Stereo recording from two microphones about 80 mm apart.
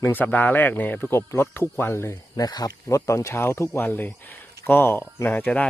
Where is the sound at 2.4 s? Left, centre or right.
Left.